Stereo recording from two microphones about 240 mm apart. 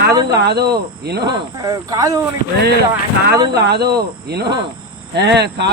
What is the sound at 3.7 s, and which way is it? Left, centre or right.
Speech, right.